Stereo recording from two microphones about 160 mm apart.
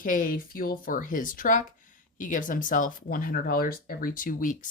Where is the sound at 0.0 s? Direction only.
60° left (ahead or behind).